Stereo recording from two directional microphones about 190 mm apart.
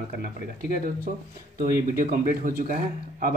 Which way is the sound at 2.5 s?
45° right (ahead or behind).